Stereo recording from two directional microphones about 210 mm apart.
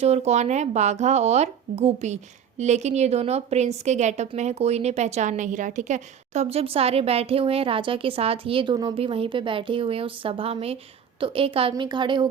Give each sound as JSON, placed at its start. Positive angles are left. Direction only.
{"t": 0.0, "sound": "a woman's voice", "side_deg": -30}